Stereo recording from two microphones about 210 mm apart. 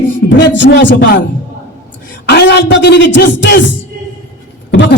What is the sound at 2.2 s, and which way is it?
A man's voice, 55° left (ahead or behind).